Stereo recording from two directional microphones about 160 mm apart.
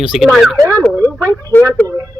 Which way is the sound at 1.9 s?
20° right (ahead or behind).